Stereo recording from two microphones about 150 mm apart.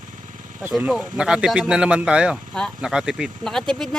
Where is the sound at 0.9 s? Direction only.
5° right (ahead or behind).